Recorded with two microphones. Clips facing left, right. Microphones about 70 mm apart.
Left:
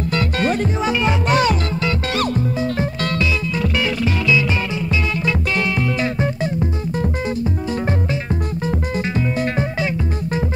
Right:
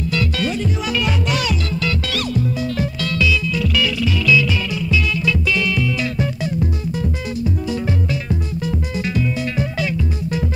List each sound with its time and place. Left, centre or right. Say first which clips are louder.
0.1 s music: left 3 dB; left
0.8 s music: left 5 dB; left
9.4 s music: left 2 dB; left